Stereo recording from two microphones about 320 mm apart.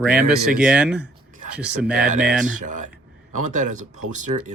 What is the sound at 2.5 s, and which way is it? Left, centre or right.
Speech, right.